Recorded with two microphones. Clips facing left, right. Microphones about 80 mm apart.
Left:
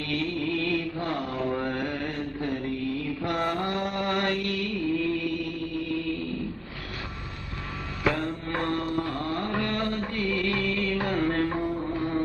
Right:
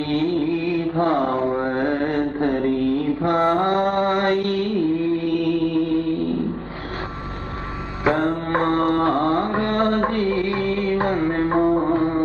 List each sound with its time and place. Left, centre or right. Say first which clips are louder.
0.1 s music: right 9 dB; right
0.4 s mantra: right 6 dB; right
0.9 s mantra: right 11 dB; right
8.0 s mantra: right 8 dB; right
8.3 s music: right 9 dB; right
8.9 s mantra: right 11 dB; right
10.2 s music: right 6 dB; right
11.4 s music: right 11 dB; right